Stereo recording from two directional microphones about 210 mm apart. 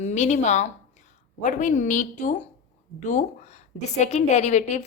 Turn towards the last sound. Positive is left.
turn(degrees=35)  # may be behind; listen again after turning